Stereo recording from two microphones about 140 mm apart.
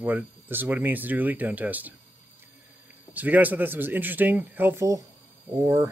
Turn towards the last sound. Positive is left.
turn(degrees=-25)  # may be behind; listen again after turning